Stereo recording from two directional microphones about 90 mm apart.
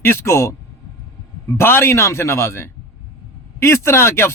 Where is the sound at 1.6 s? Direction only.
25° left (ahead or behind).